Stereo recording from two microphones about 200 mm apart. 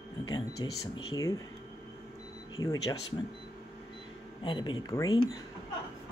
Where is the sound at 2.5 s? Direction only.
20° left (ahead or behind).